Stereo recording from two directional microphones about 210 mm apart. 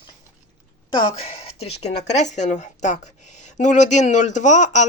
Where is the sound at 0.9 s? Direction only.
25° left (ahead or behind).